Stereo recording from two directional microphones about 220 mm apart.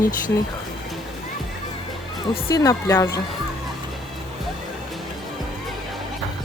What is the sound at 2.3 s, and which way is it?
Speech, 15° left (ahead or behind).